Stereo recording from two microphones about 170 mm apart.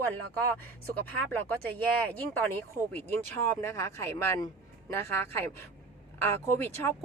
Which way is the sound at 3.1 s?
15° left (ahead or behind).